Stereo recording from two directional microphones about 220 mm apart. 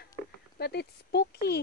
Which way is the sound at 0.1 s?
45° left (ahead or behind).